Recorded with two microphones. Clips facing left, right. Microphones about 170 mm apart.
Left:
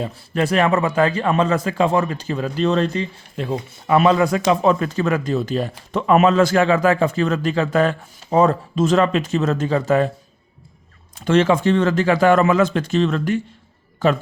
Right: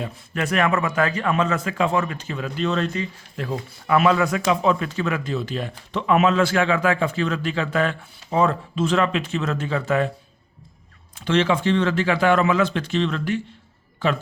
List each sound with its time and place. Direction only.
0.0 s a man's voice: 30° left (ahead or behind)
11.3 s speech: 45° left (ahead or behind)